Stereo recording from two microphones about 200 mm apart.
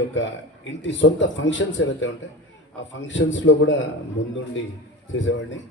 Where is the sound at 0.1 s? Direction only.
65° left (ahead or behind).